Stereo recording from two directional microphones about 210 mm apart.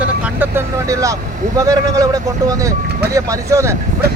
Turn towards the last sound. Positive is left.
turn(degrees=-15)  # may be behind; listen again after turning